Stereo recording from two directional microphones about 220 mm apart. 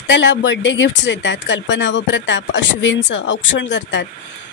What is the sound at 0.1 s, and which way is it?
Speech, 55° left (ahead or behind).